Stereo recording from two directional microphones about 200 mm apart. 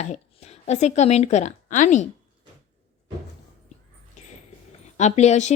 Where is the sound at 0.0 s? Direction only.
35° left (ahead or behind).